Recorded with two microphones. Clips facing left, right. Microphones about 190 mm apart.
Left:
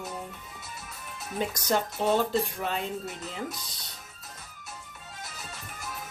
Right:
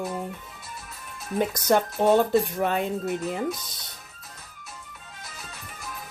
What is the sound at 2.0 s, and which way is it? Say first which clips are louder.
Speech: right 6 dB; 55° right (ahead or behind).